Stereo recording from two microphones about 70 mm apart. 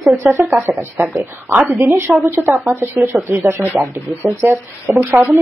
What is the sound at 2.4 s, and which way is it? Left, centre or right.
Speech, right.